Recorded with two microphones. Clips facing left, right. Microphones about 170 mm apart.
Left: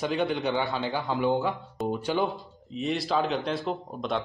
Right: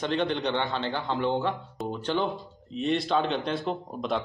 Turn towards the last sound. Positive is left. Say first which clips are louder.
# right 1 dB
turn(degrees=0)  # may be behind; listen again after turning